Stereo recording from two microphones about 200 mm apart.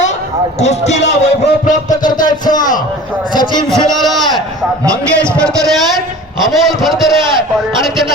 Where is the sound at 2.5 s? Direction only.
20° left (ahead or behind).